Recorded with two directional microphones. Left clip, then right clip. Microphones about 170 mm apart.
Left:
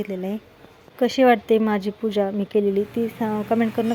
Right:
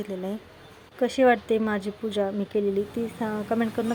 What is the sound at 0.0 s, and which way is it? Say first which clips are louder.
Speech: left 4 dB; 30° left (ahead or behind).